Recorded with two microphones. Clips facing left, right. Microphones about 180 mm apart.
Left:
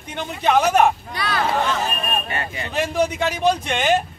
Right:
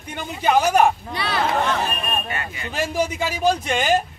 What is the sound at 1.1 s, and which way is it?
Speech, 30° right (ahead or behind).